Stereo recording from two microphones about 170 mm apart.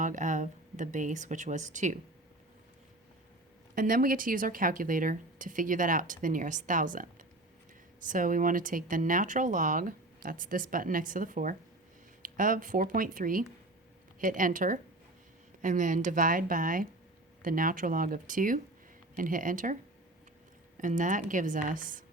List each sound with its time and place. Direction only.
0.0 s speech: 50° right (ahead or behind)
3.8 s speech: 55° right (ahead or behind)
20.7 s speech: 50° right (ahead or behind)